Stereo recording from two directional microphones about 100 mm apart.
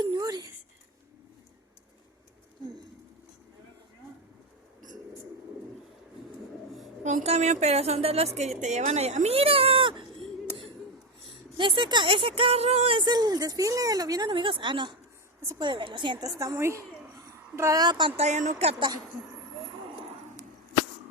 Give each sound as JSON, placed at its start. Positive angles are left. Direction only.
{"t": 0.0, "sound": "a sound", "side_deg": -45}
{"t": 7.3, "sound": "a woman's voice", "side_deg": -90}
{"t": 11.5, "sound": "speech", "side_deg": -55}
{"t": 13.0, "sound": "a woman's voice", "side_deg": -45}
{"t": 14.3, "sound": "a woman's voice", "side_deg": -60}
{"t": 16.2, "sound": "a woman's voice", "side_deg": -35}
{"t": 18.2, "sound": "a woman's voice", "side_deg": -90}